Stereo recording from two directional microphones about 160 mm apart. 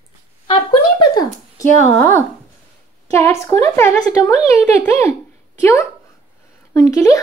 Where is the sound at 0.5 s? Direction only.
30° left (ahead or behind).